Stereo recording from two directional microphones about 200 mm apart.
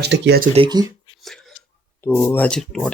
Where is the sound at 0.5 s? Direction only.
20° right (ahead or behind).